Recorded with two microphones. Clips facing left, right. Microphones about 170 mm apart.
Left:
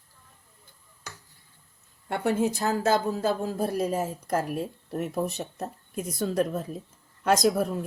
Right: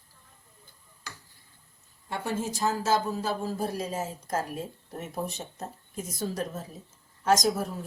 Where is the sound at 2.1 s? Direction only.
60° left (ahead or behind).